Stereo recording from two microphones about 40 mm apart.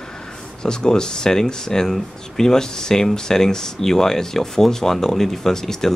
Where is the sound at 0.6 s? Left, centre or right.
Centre.